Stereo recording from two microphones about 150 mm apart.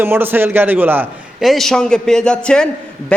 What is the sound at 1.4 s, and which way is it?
A man's voice, centre (ahead or behind).